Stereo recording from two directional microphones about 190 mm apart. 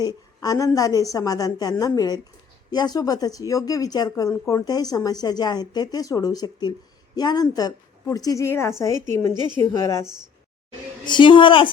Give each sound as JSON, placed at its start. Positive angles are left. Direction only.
{"t": 0.0, "sound": "a woman's voice", "side_deg": 20}